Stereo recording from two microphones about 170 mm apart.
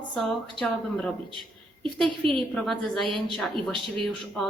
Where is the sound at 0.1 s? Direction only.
5° left (ahead or behind).